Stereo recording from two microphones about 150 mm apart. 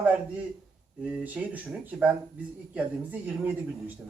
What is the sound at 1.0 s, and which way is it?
Speech, 10° right (ahead or behind).